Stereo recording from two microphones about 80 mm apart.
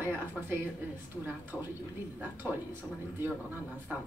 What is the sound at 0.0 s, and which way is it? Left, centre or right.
Speech, right.